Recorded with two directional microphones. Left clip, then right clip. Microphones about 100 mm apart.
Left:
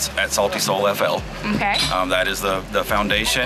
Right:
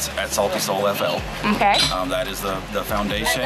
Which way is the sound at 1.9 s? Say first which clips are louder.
Left 4 dB; 15° left (ahead or behind).